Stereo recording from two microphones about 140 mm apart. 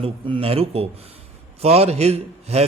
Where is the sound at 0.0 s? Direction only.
40° right (ahead or behind).